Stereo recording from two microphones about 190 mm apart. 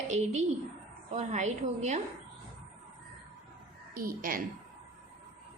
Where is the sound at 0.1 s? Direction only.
35° right (ahead or behind).